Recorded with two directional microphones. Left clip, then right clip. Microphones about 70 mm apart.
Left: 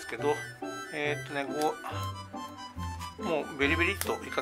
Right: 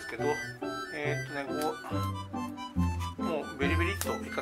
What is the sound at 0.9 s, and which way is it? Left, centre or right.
Speech, left.